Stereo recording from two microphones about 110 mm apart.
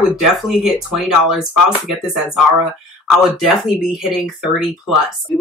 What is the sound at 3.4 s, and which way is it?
Speech, 5° right (ahead or behind).